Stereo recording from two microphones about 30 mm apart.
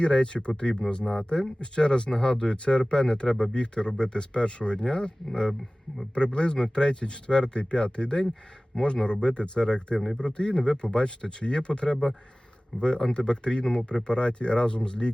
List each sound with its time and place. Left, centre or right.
0.0 s speech: left
12.7 s speech: left